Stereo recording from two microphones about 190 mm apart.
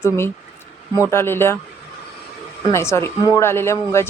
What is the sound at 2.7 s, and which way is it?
Speech, 15° left (ahead or behind).